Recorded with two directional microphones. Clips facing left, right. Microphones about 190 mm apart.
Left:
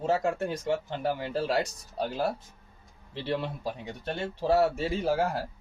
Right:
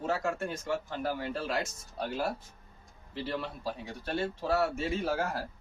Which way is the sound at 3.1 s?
25° left (ahead or behind).